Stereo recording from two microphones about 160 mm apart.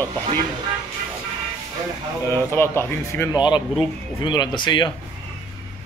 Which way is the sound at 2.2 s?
15° left (ahead or behind).